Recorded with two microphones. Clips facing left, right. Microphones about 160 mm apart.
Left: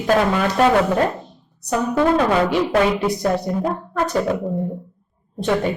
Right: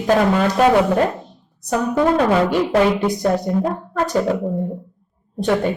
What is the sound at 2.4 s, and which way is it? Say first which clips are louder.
Speech: right 1 dB; 5° left (ahead or behind).